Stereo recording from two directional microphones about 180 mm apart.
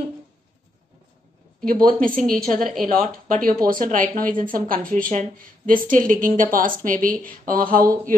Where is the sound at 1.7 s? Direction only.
50° right (ahead or behind).